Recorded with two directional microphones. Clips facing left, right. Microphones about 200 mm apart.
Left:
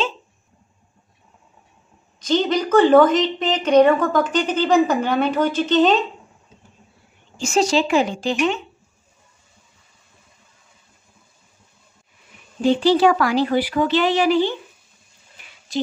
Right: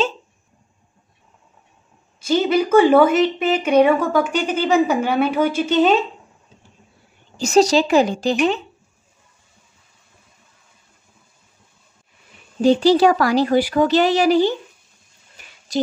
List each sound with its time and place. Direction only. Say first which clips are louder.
2.1 s a woman's voice: right 2 dB; 10° right (ahead or behind)
7.3 s speech: right 4 dB; 35° right (ahead or behind)
12.6 s speech: right 2 dB; 40° right (ahead or behind)